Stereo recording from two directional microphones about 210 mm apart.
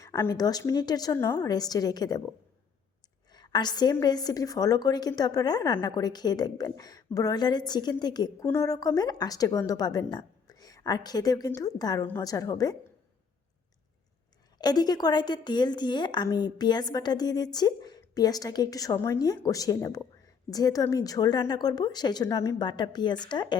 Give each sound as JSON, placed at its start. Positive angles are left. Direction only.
{"t": 0.0, "sound": "a woman's voice", "side_deg": 15}
{"t": 3.3, "sound": "a woman's voice", "side_deg": 20}
{"t": 14.6, "sound": "a woman's voice", "side_deg": 20}